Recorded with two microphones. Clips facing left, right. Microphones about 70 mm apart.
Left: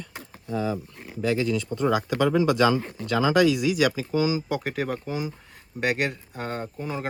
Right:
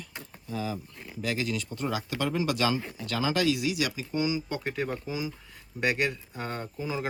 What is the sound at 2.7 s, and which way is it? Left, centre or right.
Speech, left.